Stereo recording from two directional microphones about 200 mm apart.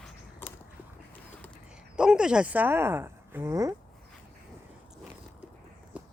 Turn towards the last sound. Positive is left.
turn(degrees=-5)  # may be behind; listen again after turning